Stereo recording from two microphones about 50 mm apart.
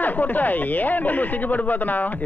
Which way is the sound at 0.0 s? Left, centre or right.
Left.